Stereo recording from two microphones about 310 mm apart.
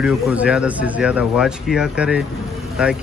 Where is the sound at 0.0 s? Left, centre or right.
Centre.